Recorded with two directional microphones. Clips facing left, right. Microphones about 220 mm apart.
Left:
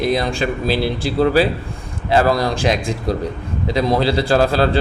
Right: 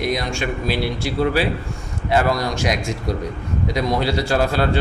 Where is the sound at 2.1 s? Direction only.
30° left (ahead or behind).